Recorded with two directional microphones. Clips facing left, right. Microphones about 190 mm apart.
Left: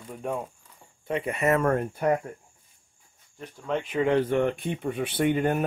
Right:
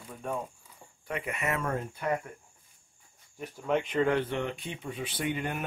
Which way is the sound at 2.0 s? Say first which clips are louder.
Left 7 dB; 40° left (ahead or behind).